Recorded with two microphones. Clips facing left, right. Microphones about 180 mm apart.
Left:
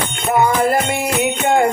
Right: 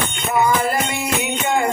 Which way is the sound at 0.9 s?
55° left (ahead or behind).